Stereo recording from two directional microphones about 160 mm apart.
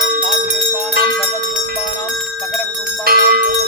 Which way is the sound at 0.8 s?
Centre (ahead or behind).